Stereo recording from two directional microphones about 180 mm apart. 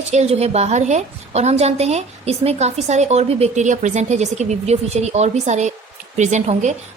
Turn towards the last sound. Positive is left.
turn(degrees=-40)  # may be behind; listen again after turning